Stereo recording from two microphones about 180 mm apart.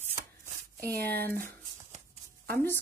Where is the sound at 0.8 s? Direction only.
55° right (ahead or behind).